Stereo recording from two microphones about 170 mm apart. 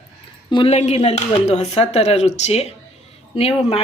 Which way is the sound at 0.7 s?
40° left (ahead or behind).